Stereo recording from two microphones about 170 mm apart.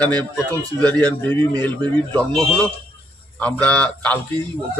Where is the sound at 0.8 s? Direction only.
10° left (ahead or behind).